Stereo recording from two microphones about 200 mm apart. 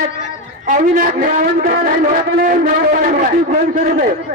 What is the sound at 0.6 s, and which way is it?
A man's voice, 40° right (ahead or behind).